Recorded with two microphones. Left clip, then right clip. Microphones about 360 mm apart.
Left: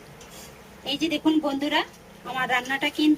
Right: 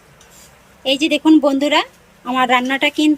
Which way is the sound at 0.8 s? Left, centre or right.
Centre.